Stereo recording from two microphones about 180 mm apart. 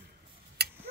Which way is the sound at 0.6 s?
60° right (ahead or behind).